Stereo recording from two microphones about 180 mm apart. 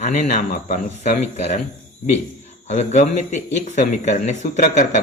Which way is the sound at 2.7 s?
40° left (ahead or behind).